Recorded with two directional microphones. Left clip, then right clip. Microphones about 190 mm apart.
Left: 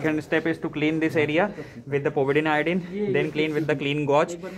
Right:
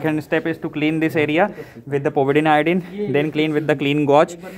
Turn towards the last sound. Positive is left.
turn(degrees=-45)  # may be behind; listen again after turning